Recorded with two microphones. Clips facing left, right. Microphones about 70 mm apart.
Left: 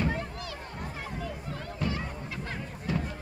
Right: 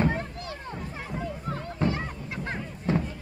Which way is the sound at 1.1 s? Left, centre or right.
Right.